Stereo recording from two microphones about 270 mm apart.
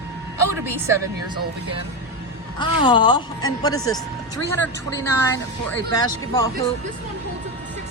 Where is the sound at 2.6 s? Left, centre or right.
Centre.